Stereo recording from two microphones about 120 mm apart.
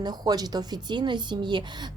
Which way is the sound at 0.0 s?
35° right (ahead or behind).